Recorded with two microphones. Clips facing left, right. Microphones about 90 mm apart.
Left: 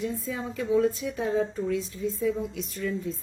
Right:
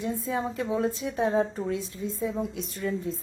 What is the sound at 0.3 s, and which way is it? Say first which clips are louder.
Speech: left 4 dB; 40° right (ahead or behind).